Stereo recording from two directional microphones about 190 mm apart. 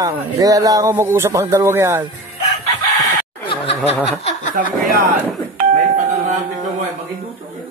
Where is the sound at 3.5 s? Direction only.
30° left (ahead or behind).